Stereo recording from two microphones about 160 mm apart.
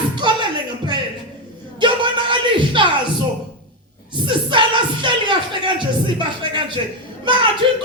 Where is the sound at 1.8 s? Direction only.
30° right (ahead or behind).